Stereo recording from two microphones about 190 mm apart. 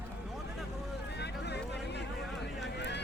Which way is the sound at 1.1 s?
60° left (ahead or behind).